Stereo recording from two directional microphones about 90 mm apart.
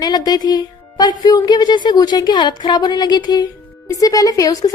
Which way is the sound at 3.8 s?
40° left (ahead or behind).